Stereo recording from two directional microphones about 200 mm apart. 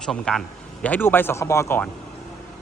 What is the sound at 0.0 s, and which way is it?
Speech, centre (ahead or behind).